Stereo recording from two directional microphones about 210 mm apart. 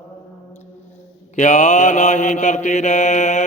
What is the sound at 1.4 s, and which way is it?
Mantra, 35° left (ahead or behind).